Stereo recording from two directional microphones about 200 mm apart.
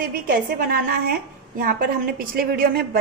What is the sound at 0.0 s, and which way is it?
Speech, 45° right (ahead or behind).